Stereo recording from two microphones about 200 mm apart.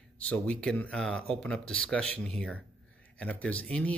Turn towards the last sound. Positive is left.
turn(degrees=5)  # may be behind; listen again after turning